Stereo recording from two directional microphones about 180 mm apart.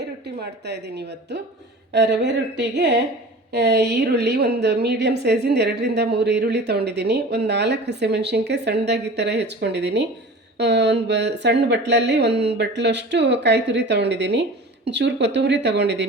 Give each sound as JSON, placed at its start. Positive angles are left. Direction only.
{"t": 0.0, "sound": "a woman's voice", "side_deg": -70}